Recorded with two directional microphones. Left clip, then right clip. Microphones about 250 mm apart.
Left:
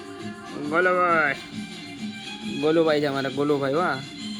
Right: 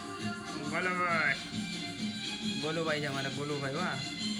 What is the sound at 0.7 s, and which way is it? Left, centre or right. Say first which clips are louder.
Speech: left 11 dB; left.